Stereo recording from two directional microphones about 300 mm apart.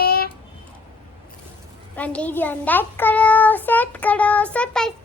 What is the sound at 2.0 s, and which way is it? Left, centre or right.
A child's voice, centre.